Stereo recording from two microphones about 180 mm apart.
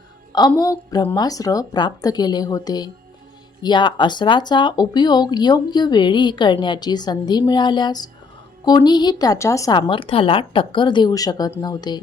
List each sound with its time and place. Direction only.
0.3 s speech: 20° left (ahead or behind)